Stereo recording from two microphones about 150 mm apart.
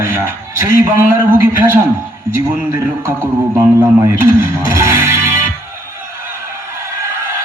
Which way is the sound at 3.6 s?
15° right (ahead or behind).